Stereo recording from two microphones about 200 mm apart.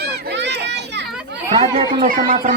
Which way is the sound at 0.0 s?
55° right (ahead or behind).